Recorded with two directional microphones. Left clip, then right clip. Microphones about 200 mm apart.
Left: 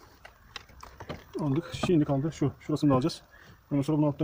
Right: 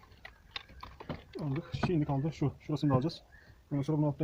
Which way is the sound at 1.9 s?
50° left (ahead or behind).